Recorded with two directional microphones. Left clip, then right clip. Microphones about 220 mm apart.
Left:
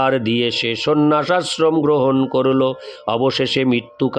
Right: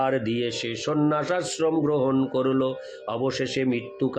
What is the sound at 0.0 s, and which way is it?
A man's voice, 45° left (ahead or behind).